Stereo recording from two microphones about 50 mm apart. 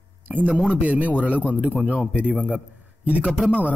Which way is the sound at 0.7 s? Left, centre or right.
Right.